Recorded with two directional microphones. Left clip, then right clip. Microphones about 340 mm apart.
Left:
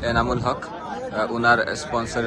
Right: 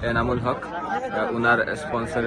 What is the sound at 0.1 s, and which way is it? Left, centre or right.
A man's voice, centre.